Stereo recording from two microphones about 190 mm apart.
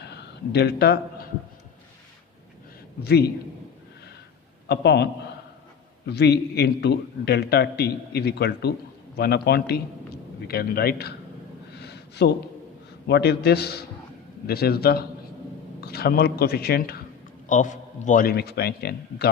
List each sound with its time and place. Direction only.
0.0 s a sound: 60° left (ahead or behind)
3.0 s a man's voice: 55° left (ahead or behind)
4.7 s a man's voice: 60° left (ahead or behind)
6.1 s a man's voice: 60° left (ahead or behind)
11.8 s a sound: 60° left (ahead or behind)
13.1 s a man's voice: 60° left (ahead or behind)
17.5 s a man's voice: 40° left (ahead or behind); by 19.3 s 55° left (ahead or behind)